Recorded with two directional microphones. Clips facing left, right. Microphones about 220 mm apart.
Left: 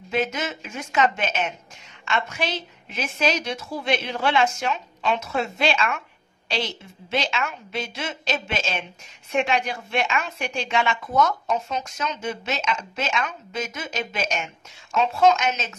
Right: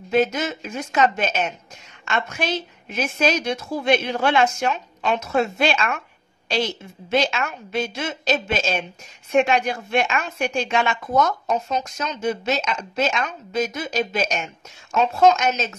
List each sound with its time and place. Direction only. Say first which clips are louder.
0.1 s a woman's voice: right 5 dB; 40° right (ahead or behind)